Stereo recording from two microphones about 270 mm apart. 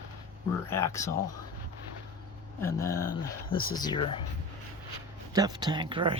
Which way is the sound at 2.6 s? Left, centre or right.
Centre.